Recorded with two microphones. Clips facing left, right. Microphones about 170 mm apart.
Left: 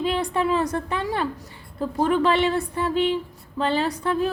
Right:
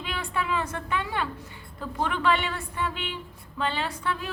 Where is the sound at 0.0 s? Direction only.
35° left (ahead or behind).